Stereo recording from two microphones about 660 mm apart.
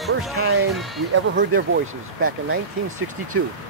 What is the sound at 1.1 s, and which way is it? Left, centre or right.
Speech, centre.